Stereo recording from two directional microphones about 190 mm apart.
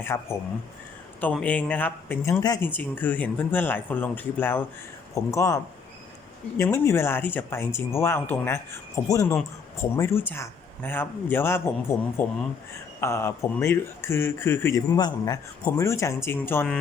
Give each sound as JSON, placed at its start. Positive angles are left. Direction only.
{"t": 0.0, "sound": "speech", "side_deg": 10}
{"t": 1.4, "sound": "speech", "side_deg": 5}
{"t": 6.6, "sound": "speech", "side_deg": 15}